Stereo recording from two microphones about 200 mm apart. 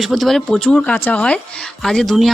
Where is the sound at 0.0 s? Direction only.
Centre (ahead or behind).